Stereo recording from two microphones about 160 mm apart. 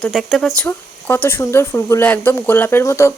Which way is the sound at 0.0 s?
Centre (ahead or behind).